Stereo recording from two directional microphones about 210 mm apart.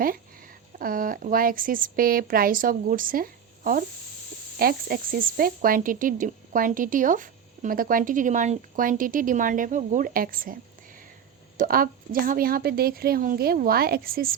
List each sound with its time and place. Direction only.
0.8 s a woman's voice: 40° right (ahead or behind)